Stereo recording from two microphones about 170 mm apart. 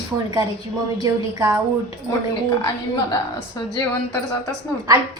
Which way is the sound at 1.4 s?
20° right (ahead or behind).